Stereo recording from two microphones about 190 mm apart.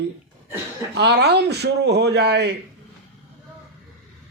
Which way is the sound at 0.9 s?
60° right (ahead or behind).